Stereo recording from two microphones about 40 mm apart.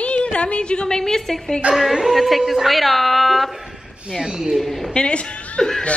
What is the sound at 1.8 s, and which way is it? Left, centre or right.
A woman's voice, centre.